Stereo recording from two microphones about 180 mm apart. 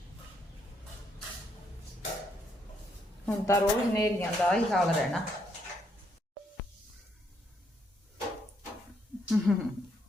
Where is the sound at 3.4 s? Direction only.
15° left (ahead or behind).